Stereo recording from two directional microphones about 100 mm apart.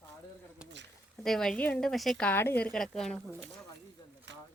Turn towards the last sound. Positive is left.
turn(degrees=5)  # may be behind; listen again after turning